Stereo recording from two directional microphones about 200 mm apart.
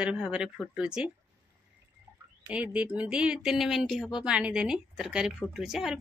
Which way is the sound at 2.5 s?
5° right (ahead or behind).